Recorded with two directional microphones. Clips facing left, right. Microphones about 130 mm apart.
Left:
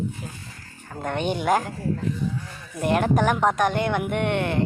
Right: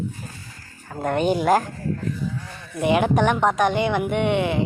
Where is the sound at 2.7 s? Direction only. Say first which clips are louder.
Right 2 dB; centre (ahead or behind).